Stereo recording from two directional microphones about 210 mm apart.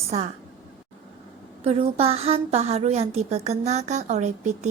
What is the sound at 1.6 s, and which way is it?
A woman's voice, 30° right (ahead or behind).